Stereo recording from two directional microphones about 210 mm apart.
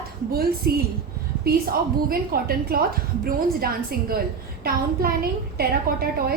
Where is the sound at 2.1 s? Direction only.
45° right (ahead or behind).